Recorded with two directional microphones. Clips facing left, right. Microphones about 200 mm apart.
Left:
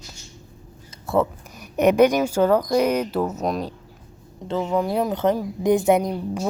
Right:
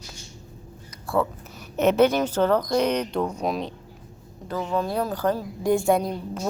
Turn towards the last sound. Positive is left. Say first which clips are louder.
# left 3 dB
turn(degrees=15)  # may be behind; listen again after turning